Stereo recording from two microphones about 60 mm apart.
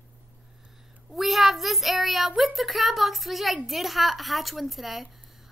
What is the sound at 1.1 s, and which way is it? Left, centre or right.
A child's voice, centre.